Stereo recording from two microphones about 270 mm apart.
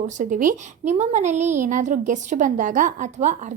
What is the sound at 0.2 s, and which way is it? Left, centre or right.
A woman's voice, right.